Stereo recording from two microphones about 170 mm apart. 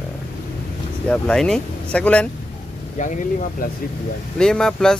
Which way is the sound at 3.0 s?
45° left (ahead or behind).